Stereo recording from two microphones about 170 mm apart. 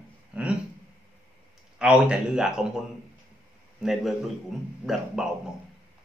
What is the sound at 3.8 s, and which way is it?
Speech, centre (ahead or behind).